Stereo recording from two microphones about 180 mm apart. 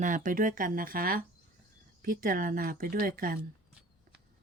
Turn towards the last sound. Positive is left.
turn(degrees=-55)  # may be behind; listen again after turning